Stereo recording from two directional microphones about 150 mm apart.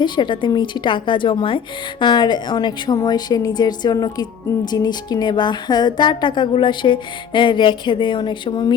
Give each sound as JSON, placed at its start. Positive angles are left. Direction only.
{"t": 0.0, "sound": "a woman's voice", "side_deg": 30}